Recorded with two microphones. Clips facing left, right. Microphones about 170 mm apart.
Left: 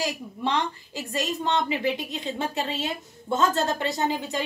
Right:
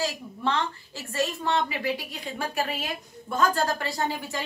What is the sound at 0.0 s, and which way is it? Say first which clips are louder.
A woman's voice: even; 15° left (ahead or behind).